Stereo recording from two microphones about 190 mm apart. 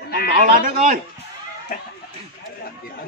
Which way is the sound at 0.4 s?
45° right (ahead or behind).